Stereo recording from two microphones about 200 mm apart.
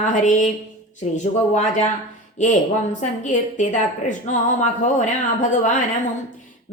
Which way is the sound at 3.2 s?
40° left (ahead or behind).